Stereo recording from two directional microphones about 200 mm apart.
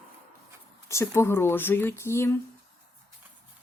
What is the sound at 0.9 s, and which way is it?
A woman's voice, 15° left (ahead or behind).